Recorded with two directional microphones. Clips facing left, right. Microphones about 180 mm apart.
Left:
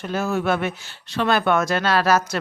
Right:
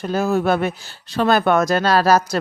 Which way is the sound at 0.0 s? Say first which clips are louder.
Right 4 dB; 35° right (ahead or behind).